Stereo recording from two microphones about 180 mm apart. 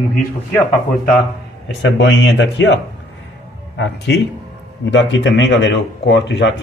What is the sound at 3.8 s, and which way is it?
Speech, 70° left (ahead or behind).